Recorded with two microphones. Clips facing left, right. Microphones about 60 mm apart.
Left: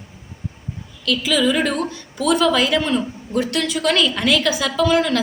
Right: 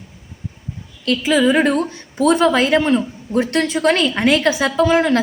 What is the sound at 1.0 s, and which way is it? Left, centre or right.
A woman's voice, right.